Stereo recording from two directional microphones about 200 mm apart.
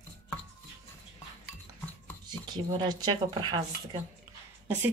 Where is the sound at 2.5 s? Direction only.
20° right (ahead or behind).